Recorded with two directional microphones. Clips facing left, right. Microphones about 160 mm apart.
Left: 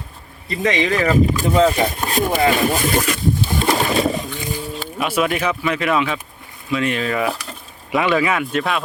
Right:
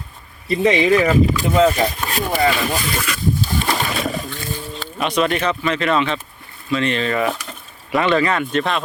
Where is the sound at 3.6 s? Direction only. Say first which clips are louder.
Left 4 dB; 25° left (ahead or behind).